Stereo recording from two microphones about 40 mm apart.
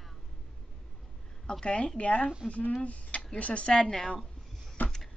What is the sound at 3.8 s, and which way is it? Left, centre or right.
Speech, centre.